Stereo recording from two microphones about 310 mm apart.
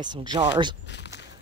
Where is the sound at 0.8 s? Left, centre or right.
Left.